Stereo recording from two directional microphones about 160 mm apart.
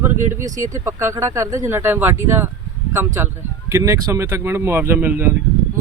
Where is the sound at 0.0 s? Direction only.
15° right (ahead or behind).